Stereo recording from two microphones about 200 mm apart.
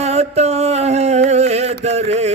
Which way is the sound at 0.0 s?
35° right (ahead or behind).